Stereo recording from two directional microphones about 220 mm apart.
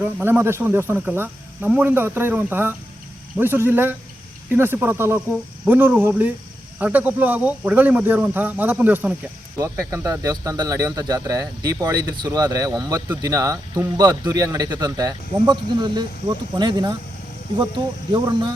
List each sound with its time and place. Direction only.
0.0 s speech: 10° right (ahead or behind)
18.1 s speech: 20° right (ahead or behind)